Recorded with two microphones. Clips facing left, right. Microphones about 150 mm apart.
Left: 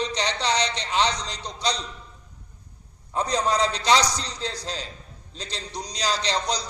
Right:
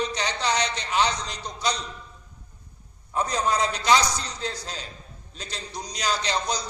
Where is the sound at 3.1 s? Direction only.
30° left (ahead or behind).